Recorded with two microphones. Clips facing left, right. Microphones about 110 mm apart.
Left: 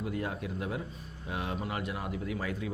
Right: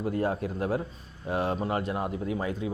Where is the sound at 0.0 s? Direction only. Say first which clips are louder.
Right 7 dB; 35° right (ahead or behind).